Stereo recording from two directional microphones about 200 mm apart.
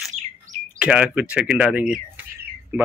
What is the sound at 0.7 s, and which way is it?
Speech, 5° right (ahead or behind).